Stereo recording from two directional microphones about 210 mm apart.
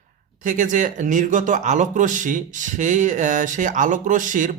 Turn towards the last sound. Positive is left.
turn(degrees=-40)  # may be behind; listen again after turning